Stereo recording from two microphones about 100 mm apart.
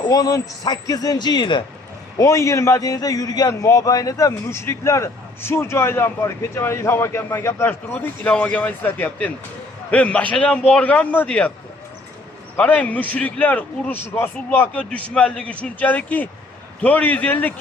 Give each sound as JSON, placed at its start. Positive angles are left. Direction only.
{"t": 0.0, "sound": "a man's voice", "side_deg": 40}
{"t": 2.1, "sound": "a man's voice", "side_deg": 30}
{"t": 12.5, "sound": "a man's voice", "side_deg": 15}
{"t": 14.8, "sound": "a man's voice", "side_deg": 10}